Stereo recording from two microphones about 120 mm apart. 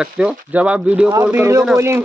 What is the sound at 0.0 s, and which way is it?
Speech, 10° right (ahead or behind).